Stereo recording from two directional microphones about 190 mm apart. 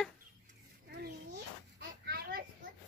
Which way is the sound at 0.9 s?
60° right (ahead or behind).